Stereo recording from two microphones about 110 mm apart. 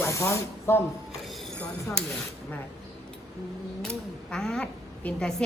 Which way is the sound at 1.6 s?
10° left (ahead or behind).